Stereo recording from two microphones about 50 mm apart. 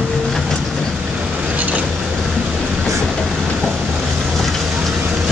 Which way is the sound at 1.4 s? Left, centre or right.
Right.